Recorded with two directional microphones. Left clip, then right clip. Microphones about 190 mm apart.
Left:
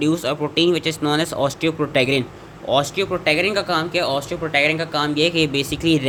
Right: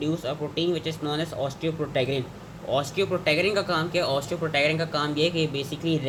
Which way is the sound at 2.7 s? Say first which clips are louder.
Left 6 dB; 25° left (ahead or behind).